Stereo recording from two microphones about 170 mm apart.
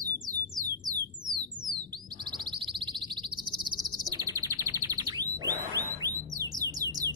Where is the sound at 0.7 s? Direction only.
25° right (ahead or behind).